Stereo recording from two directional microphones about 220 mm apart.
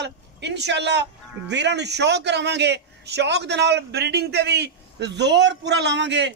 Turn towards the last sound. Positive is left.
turn(degrees=-55)  # may be behind; listen again after turning